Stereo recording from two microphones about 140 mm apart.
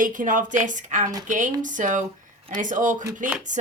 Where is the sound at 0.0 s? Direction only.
70° right (ahead or behind).